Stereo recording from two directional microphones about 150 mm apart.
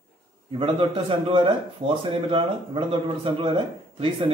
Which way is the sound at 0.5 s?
35° right (ahead or behind).